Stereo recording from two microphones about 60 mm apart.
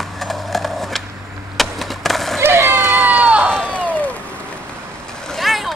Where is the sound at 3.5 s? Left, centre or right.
Centre.